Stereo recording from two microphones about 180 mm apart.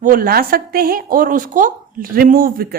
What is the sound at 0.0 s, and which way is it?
A woman's voice, 50° right (ahead or behind).